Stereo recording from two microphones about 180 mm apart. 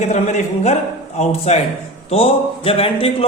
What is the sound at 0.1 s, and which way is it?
A man's voice, 40° left (ahead or behind).